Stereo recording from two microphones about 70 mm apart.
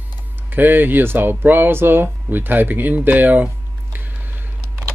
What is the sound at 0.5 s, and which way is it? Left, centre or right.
Speech, right.